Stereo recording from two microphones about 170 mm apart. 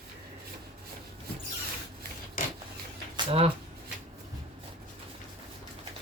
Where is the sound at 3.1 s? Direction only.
35° right (ahead or behind).